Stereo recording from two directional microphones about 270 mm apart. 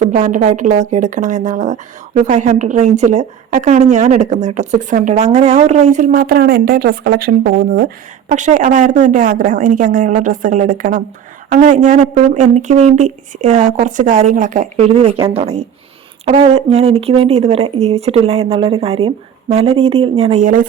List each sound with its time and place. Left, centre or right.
0.0 s speech: right